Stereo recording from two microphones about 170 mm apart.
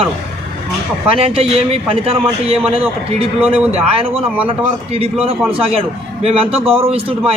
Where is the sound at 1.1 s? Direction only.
35° right (ahead or behind).